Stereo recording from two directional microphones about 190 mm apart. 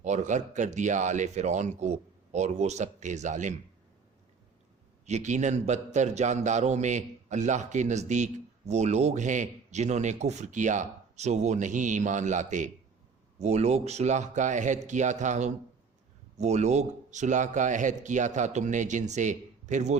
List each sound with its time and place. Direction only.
0.0 s a man's voice: 40° right (ahead or behind)
5.0 s a man's voice: 40° right (ahead or behind)